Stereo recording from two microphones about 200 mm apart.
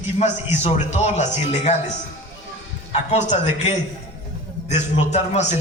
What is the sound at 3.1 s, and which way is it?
A man's voice, 35° left (ahead or behind).